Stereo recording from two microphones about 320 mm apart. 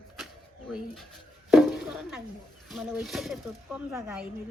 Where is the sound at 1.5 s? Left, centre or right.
Centre.